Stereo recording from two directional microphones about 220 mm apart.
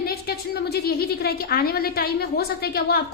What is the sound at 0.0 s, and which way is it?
A woman's voice, 45° left (ahead or behind).